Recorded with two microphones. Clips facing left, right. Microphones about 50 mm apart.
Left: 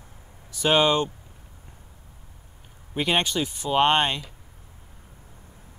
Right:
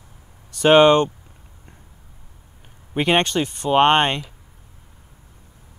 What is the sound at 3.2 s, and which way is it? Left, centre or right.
Speech, right.